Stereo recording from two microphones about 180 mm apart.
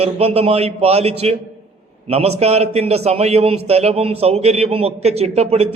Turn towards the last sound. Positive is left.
turn(degrees=-35)  # may be behind; listen again after turning